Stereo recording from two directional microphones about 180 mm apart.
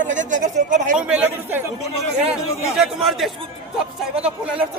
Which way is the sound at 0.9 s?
5° right (ahead or behind).